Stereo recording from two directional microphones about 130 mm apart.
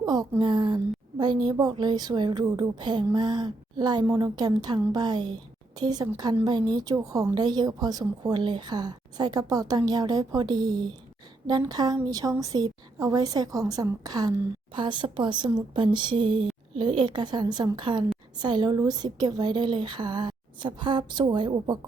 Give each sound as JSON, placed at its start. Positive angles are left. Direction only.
{"t": 0.0, "sound": "a woman's voice", "side_deg": -30}